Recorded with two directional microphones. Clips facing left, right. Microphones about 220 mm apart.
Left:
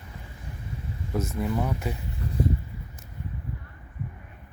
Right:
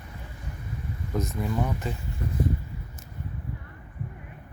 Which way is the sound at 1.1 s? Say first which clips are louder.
Left 1 dB; 5° left (ahead or behind).